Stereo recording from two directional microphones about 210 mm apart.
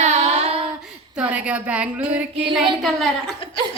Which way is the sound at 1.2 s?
5° right (ahead or behind).